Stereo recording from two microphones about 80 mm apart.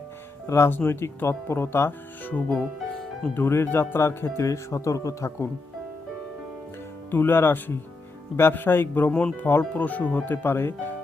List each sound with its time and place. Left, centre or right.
0.4 s speech: left
7.1 s speech: left